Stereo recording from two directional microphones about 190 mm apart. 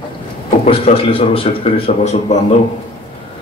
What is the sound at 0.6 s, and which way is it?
Speech, 30° left (ahead or behind).